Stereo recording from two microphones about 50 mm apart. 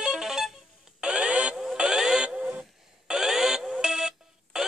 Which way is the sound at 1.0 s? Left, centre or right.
Centre.